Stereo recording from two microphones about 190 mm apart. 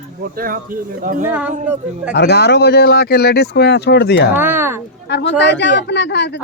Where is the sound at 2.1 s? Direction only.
60° left (ahead or behind).